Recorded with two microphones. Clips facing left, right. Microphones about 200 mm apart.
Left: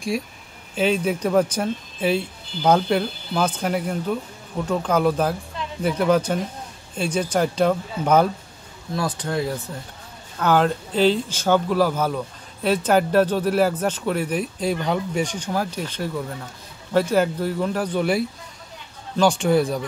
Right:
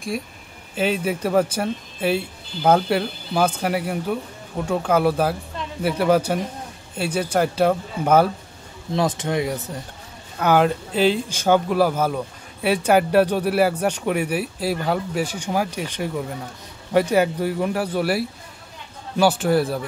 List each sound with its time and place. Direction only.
0.7 s speech: 5° right (ahead or behind)
8.9 s speech: 20° right (ahead or behind); by 19.8 s 5° right (ahead or behind)